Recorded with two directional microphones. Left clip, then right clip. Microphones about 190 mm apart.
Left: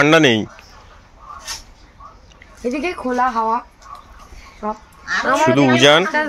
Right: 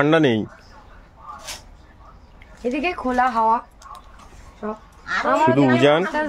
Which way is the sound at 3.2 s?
25° right (ahead or behind).